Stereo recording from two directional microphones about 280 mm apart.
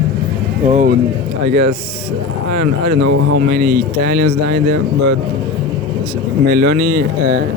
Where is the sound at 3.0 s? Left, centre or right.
Right.